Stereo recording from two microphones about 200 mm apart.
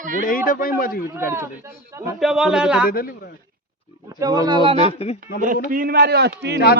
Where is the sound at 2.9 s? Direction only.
45° left (ahead or behind).